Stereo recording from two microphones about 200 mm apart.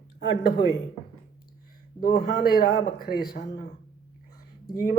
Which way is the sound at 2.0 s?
50° left (ahead or behind).